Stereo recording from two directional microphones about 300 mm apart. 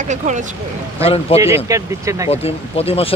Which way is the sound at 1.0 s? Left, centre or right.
Centre.